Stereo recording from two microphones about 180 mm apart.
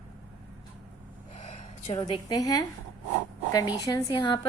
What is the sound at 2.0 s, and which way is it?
A woman's voice, 25° left (ahead or behind).